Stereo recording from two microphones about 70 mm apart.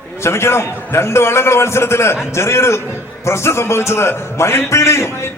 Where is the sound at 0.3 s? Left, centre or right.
Left.